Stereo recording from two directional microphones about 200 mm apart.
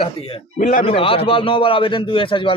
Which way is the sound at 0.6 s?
40° left (ahead or behind).